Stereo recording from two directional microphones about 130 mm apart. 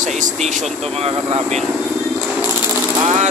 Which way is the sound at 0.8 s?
50° right (ahead or behind).